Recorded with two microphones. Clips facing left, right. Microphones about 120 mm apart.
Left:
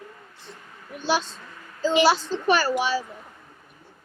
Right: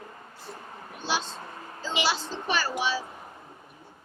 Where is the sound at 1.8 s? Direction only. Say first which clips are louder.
Left 10 dB; 45° left (ahead or behind).